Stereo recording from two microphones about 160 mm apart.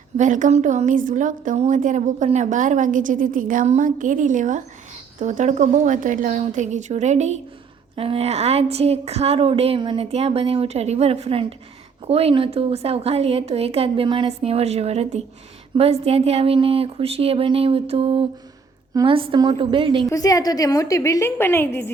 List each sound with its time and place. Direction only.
0.2 s a woman's voice: 50° right (ahead or behind)
7.9 s speech: 35° right (ahead or behind)
20.1 s a woman's voice: 20° left (ahead or behind)